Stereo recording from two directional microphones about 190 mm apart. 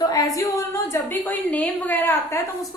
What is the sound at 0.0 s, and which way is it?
A woman's voice, 20° left (ahead or behind).